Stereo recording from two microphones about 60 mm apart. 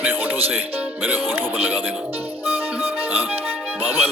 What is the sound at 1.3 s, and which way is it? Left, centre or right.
Speech, right.